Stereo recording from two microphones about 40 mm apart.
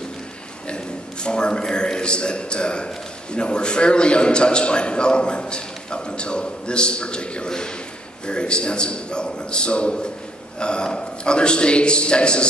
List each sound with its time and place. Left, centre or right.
1.2 s a man's voice: left